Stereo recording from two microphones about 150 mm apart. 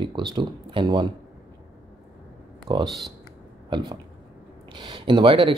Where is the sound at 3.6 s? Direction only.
30° right (ahead or behind).